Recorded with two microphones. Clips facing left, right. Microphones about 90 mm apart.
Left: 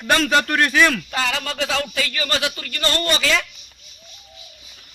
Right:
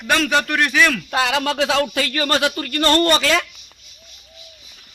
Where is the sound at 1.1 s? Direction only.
60° right (ahead or behind).